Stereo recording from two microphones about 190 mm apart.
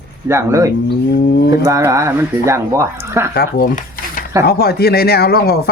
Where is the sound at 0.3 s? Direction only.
15° right (ahead or behind).